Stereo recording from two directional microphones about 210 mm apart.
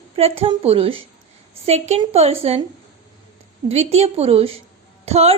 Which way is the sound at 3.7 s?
30° right (ahead or behind).